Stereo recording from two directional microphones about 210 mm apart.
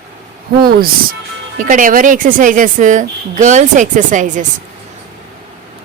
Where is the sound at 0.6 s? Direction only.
45° right (ahead or behind).